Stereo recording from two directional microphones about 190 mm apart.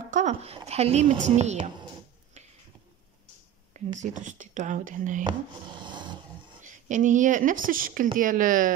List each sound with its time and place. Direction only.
0.1 s speech: 40° right (ahead or behind)
4.0 s speech: 40° right (ahead or behind)
5.2 s a sound: 25° right (ahead or behind)
6.6 s speech: 40° right (ahead or behind)